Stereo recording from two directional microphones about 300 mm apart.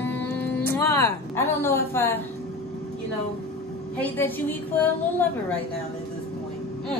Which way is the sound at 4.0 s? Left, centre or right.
Centre.